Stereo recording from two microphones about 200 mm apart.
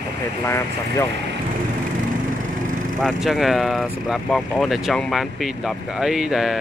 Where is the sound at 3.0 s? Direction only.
Centre (ahead or behind).